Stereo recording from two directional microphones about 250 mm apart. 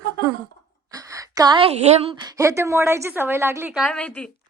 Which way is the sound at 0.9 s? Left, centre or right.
Centre.